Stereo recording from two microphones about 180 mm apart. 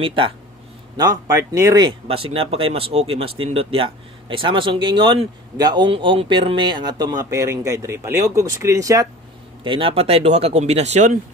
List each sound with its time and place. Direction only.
0.0 s speech: 30° right (ahead or behind)
2.0 s speech: 30° right (ahead or behind)
9.6 s speech: 30° right (ahead or behind)